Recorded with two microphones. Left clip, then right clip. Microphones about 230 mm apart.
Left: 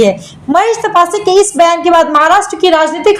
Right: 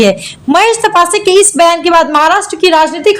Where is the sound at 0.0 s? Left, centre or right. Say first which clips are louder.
Right 1 dB; right.